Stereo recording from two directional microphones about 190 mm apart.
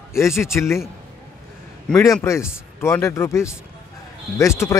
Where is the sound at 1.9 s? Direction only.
15° left (ahead or behind).